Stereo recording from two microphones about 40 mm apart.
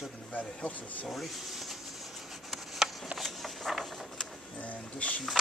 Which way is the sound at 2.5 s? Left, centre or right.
Centre.